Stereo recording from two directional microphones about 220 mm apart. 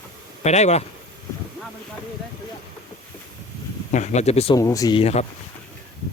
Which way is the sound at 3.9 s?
30° left (ahead or behind).